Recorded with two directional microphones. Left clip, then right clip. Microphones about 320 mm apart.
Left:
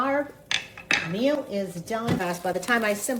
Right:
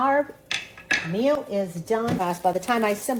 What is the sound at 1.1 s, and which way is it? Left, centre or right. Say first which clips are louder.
Speech: right 2 dB; centre.